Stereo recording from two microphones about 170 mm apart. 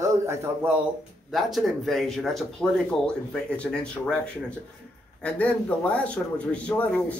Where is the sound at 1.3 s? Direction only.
Centre (ahead or behind).